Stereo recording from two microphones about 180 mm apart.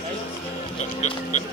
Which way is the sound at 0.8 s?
40° left (ahead or behind).